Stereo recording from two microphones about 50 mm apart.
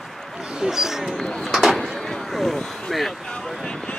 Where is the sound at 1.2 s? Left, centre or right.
Centre.